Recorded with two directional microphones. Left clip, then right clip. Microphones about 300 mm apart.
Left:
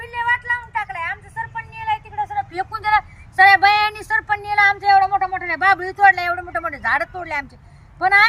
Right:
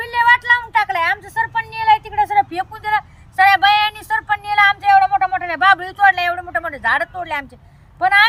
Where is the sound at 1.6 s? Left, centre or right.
Right.